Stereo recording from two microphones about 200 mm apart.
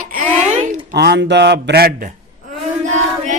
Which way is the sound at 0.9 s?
55° right (ahead or behind).